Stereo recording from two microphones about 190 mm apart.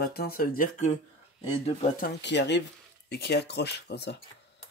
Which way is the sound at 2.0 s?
65° left (ahead or behind).